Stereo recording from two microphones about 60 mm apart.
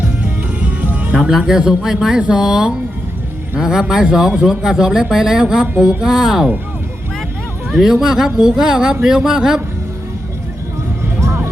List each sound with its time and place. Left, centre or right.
0.0 s music: right
1.1 s speech: centre
7.7 s speech: centre